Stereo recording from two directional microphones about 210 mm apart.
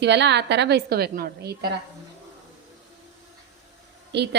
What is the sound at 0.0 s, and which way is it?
A woman's voice, 55° right (ahead or behind).